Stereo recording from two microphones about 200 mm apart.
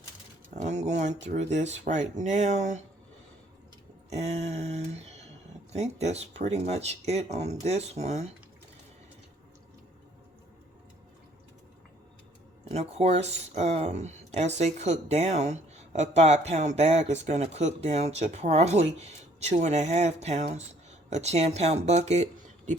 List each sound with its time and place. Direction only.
0.5 s speech: 35° right (ahead or behind)
4.1 s speech: 35° right (ahead or behind)
12.7 s speech: 30° right (ahead or behind)